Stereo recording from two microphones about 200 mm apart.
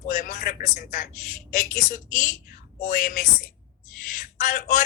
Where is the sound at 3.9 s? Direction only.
40° left (ahead or behind).